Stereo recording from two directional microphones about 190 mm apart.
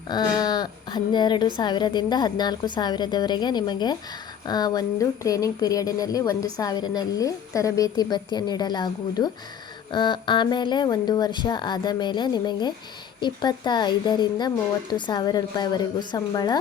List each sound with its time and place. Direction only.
0.1 s speech: 20° left (ahead or behind)